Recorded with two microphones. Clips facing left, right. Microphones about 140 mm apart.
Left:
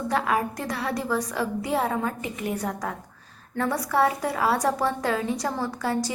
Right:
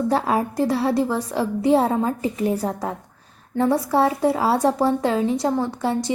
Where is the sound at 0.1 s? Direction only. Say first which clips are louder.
Right 4 dB; 30° right (ahead or behind).